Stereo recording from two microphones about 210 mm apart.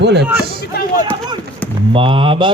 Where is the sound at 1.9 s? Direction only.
25° right (ahead or behind).